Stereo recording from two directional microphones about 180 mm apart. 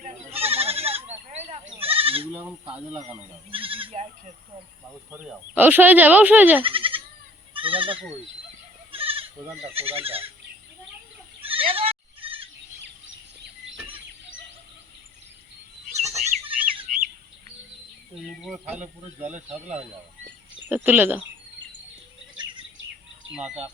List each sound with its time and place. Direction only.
0.0 s goat: 35° right (ahead or behind)
2.3 s speech: 10° right (ahead or behind)
3.5 s speech: 30° right (ahead or behind)
5.1 s speech: 10° right (ahead or behind)
6.6 s goat: 30° right (ahead or behind)
7.5 s speech: 30° right (ahead or behind)
8.9 s bleat: 30° right (ahead or behind)
9.7 s speech: 30° right (ahead or behind)
11.4 s bleat: 30° right (ahead or behind)
15.9 s goat: 40° right (ahead or behind)
18.1 s speech: centre (ahead or behind)
19.2 s speech: 40° right (ahead or behind)
20.7 s speech: 10° right (ahead or behind)
23.3 s speech: 5° right (ahead or behind)